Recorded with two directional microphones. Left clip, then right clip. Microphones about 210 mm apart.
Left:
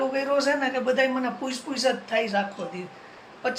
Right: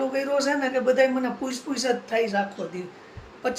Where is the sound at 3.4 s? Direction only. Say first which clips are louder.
Even; 10° right (ahead or behind).